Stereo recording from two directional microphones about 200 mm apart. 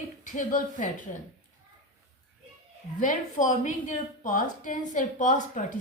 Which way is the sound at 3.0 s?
40° left (ahead or behind).